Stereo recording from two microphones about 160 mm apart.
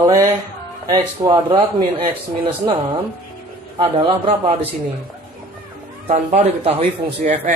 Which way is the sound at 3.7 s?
35° right (ahead or behind).